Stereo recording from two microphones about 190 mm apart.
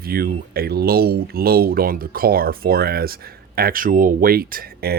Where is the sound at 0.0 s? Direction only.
50° right (ahead or behind).